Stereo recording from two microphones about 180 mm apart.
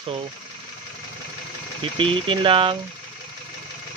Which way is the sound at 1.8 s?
30° right (ahead or behind).